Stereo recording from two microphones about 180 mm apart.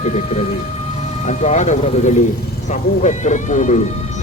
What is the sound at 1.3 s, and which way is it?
Speech, 40° left (ahead or behind).